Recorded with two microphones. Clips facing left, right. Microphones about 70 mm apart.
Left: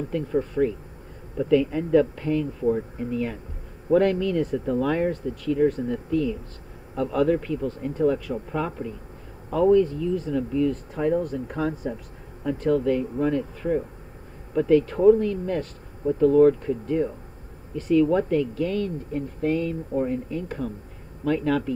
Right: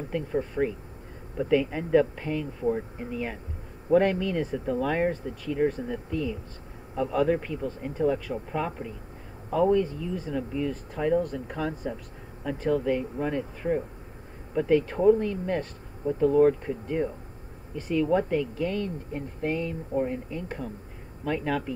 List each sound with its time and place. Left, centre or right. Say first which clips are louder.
0.1 s speech: left 2 dB; centre
11.0 s speech: even; centre